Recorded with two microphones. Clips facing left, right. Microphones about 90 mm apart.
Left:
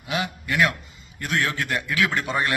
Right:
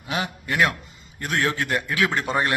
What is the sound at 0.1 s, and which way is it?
A man's voice, 35° right (ahead or behind).